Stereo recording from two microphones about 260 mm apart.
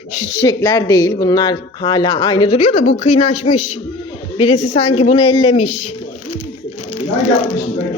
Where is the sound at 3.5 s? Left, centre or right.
Left.